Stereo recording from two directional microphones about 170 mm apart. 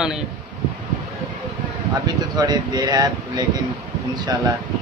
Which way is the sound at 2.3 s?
25° right (ahead or behind).